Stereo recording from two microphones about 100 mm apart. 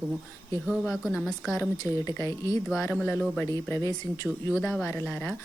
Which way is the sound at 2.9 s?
15° left (ahead or behind).